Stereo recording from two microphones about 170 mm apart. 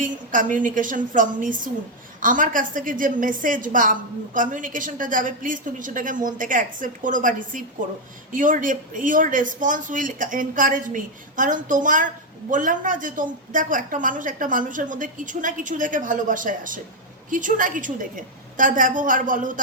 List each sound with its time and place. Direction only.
0.0 s speech: 50° right (ahead or behind)